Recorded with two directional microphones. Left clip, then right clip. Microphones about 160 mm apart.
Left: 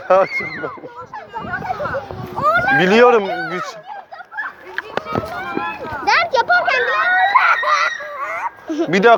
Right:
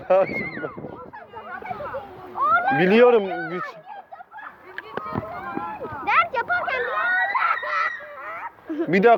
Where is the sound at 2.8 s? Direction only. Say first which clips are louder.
Left 4 dB; 40° right (ahead or behind).